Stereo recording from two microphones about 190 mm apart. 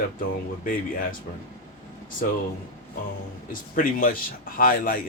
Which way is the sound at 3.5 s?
45° left (ahead or behind).